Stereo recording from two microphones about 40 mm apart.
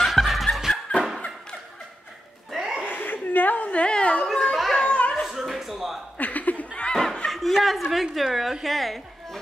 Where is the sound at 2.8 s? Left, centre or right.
Left.